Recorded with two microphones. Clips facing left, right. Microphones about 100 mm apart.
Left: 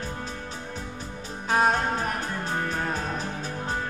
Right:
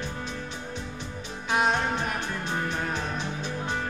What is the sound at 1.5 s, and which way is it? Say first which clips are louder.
Music: left 2 dB; 40° left (ahead or behind).